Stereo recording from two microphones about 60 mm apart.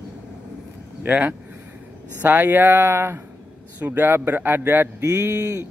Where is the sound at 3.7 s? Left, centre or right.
Right.